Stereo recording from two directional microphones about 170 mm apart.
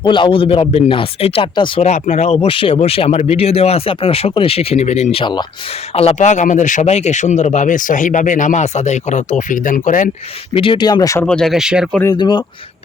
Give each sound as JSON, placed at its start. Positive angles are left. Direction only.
{"t": 0.0, "sound": "speech", "side_deg": 30}
{"t": 10.5, "sound": "speech", "side_deg": 30}
{"t": 11.3, "sound": "speech", "side_deg": 5}
{"t": 12.1, "sound": "speech", "side_deg": 25}